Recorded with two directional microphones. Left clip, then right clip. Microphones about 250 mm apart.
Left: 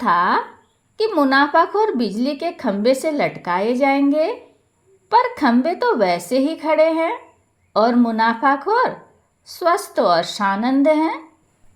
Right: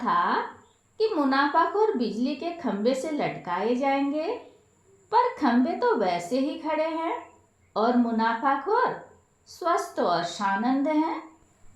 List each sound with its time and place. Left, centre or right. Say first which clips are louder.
0.0 s a woman's voice: left 8 dB; left